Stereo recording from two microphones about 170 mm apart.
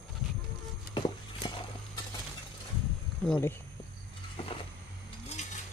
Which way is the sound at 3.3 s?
15° left (ahead or behind).